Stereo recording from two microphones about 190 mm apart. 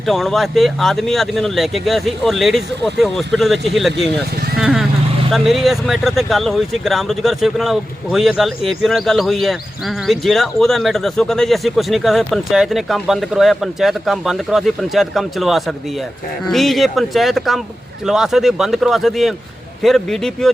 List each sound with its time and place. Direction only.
0.0 s speech: centre (ahead or behind)
4.5 s vehicle: centre (ahead or behind)
5.3 s speech: centre (ahead or behind)